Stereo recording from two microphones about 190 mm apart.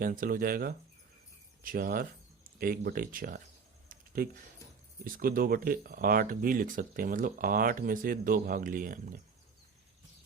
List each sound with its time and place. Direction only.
0.0 s speech: 45° right (ahead or behind)
3.8 s a sound: 50° right (ahead or behind)
5.0 s speech: 45° right (ahead or behind)